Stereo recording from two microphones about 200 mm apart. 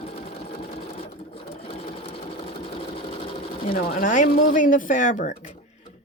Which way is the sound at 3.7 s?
45° left (ahead or behind).